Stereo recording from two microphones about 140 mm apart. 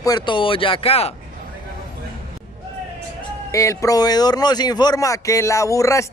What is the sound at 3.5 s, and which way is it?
Speech, 20° left (ahead or behind).